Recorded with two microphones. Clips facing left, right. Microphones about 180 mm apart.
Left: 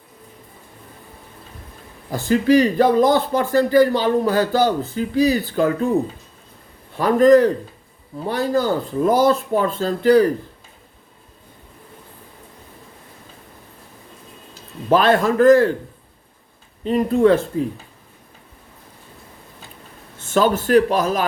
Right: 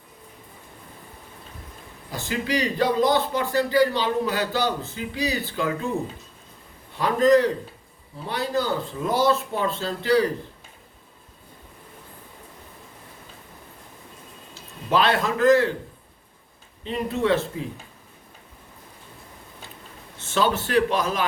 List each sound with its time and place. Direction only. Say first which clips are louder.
2.0 s speech: left 11 dB; 50° left (ahead or behind)
6.9 s speech: left 6 dB; 50° left (ahead or behind)
14.8 s speech: left 6 dB; 45° left (ahead or behind)
16.8 s speech: left 9 dB; 45° left (ahead or behind)
20.3 s speech: left 6 dB; 50° left (ahead or behind)